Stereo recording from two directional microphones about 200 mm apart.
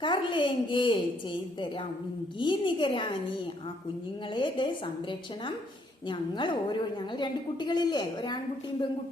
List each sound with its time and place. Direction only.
0.0 s a woman's voice: 25° left (ahead or behind)
2.4 s a woman's voice: 25° left (ahead or behind)
4.4 s a woman's voice: 25° left (ahead or behind)
6.1 s a woman's voice: 25° left (ahead or behind)